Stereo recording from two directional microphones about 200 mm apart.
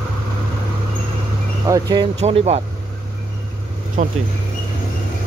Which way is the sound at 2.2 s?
30° right (ahead or behind).